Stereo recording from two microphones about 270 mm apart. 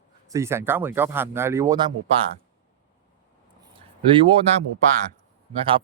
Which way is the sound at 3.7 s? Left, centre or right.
Centre.